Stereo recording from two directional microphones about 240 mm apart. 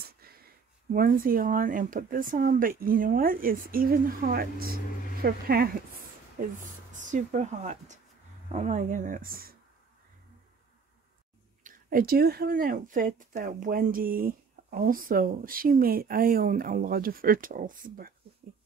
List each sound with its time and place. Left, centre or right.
0.0 s a sound: right
0.9 s speech: right
11.6 s speech: right